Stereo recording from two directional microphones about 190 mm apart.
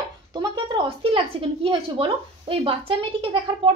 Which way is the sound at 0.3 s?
25° right (ahead or behind).